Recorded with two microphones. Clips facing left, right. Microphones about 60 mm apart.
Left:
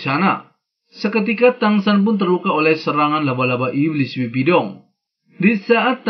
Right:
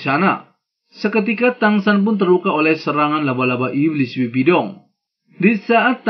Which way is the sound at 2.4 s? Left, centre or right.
Right.